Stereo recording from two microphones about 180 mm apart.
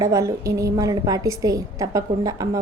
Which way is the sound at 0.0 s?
15° right (ahead or behind).